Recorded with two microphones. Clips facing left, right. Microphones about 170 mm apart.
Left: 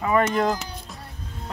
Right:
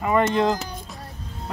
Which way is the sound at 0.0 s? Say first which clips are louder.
Right 1 dB; 25° right (ahead or behind).